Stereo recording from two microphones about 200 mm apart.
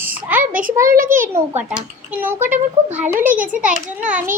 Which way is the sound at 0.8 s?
45° right (ahead or behind).